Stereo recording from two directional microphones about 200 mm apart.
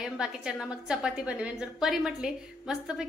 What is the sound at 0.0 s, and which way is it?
A woman's voice, 5° right (ahead or behind).